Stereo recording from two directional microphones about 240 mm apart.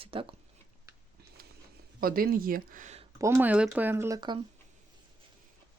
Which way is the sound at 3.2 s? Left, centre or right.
Centre.